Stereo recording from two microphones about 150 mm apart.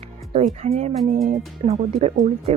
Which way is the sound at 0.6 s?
45° right (ahead or behind).